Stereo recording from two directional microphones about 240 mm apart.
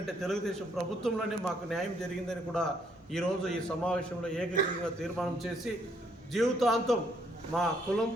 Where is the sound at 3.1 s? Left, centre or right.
Centre.